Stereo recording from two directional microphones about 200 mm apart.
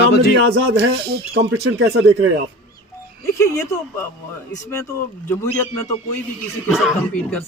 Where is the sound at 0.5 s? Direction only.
60° right (ahead or behind).